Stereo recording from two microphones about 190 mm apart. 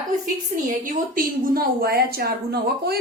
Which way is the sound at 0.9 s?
50° right (ahead or behind).